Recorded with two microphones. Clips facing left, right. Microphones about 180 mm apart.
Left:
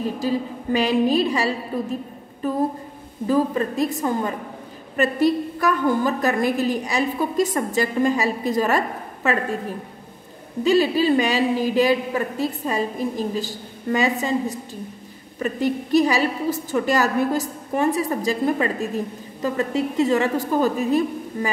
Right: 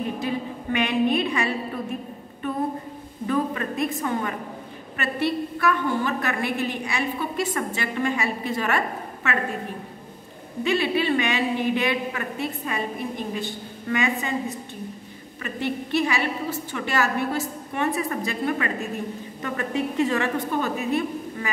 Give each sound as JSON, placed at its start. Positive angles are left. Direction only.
{"t": 0.2, "sound": "a woman's voice", "side_deg": 35}
{"t": 3.3, "sound": "a woman's voice", "side_deg": 35}
{"t": 10.6, "sound": "a woman's voice", "side_deg": 35}
{"t": 15.4, "sound": "a woman's voice", "side_deg": 40}